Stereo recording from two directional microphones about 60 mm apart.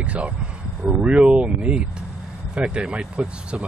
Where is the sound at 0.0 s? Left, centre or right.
Right.